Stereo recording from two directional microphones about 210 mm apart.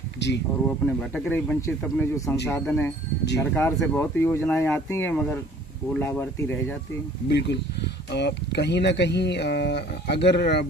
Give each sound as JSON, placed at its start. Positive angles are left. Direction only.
{"t": 0.2, "sound": "speech", "side_deg": 55}
{"t": 0.7, "sound": "speech", "side_deg": 5}
{"t": 7.2, "sound": "speech", "side_deg": 55}